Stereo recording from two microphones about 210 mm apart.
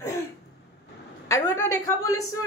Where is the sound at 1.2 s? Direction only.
15° left (ahead or behind).